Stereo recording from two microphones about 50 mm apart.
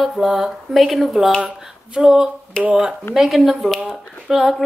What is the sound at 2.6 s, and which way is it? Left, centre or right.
Speech, right.